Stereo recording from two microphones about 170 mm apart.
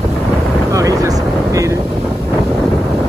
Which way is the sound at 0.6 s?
20° right (ahead or behind).